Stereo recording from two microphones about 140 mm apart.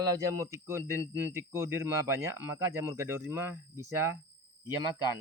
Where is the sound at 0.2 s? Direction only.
20° right (ahead or behind).